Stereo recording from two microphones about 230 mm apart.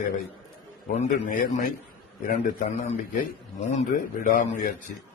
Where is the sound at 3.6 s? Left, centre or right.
Left.